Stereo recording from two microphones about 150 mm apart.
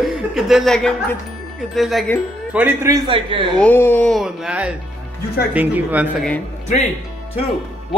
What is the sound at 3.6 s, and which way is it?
Speech, 15° left (ahead or behind).